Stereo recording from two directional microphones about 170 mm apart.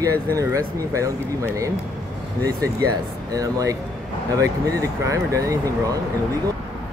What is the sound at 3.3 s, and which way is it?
Speech, 20° right (ahead or behind).